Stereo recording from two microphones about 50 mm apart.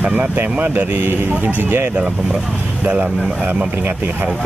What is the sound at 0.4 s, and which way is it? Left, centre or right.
Speech, right.